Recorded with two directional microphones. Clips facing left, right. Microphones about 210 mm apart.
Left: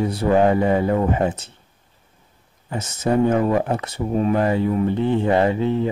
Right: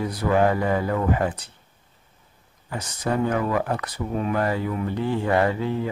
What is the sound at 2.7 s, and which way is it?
Speech, 25° left (ahead or behind).